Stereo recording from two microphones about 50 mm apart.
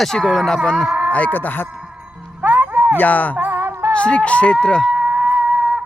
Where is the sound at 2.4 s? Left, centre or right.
Right.